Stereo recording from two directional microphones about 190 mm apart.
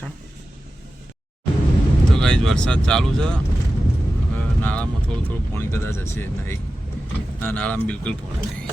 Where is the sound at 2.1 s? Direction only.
5° left (ahead or behind).